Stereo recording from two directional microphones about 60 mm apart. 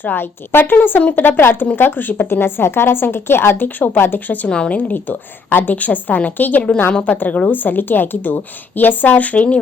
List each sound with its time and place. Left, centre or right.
0.0 s a woman's voice: left
4.4 s a woman's voice: centre